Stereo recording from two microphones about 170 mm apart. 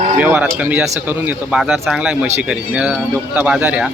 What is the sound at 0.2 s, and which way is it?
Speech, 10° right (ahead or behind).